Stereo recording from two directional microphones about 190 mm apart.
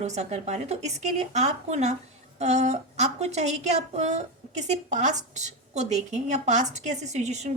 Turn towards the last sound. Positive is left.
turn(degrees=-35)  # may be behind; listen again after turning